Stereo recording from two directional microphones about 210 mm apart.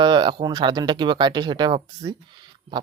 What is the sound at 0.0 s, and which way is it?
Speech, 20° right (ahead or behind).